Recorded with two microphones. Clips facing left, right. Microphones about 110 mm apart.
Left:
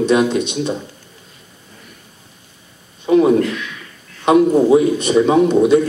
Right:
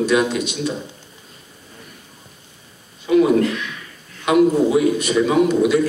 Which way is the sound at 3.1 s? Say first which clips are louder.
Left 2 dB; 35° left (ahead or behind).